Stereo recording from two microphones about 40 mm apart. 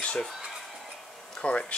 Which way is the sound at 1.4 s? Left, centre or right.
Left.